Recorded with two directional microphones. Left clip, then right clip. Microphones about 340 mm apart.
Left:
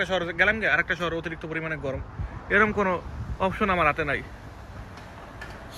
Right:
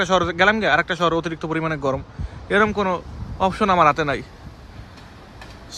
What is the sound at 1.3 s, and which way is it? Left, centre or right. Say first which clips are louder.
Speech: right 7 dB; centre.